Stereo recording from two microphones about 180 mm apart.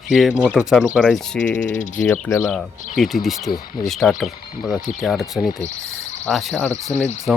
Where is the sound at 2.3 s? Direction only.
20° left (ahead or behind).